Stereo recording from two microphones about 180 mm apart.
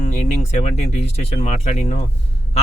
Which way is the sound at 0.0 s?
40° left (ahead or behind).